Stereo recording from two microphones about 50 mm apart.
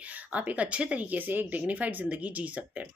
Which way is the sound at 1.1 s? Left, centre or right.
Right.